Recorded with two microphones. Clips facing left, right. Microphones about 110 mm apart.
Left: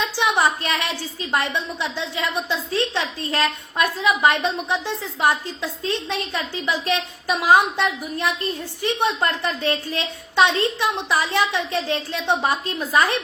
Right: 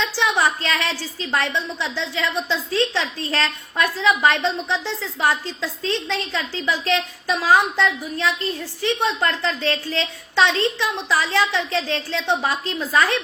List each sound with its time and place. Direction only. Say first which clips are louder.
0.2 s a woman's voice: left 1 dB; 20° left (ahead or behind)